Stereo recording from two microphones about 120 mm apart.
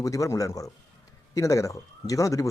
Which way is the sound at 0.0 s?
25° left (ahead or behind).